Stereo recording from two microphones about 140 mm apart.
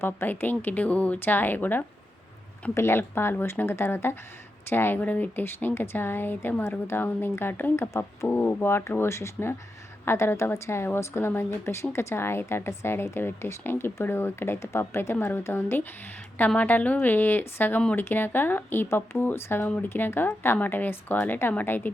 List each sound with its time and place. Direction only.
0.0 s a woman's voice: 15° left (ahead or behind)